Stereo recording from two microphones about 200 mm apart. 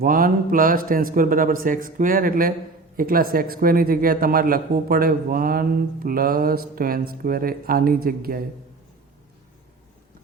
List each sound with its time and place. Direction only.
0.0 s a man's voice: 45° right (ahead or behind)